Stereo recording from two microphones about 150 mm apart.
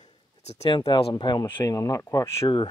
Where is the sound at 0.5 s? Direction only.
35° left (ahead or behind); by 2.5 s 20° left (ahead or behind).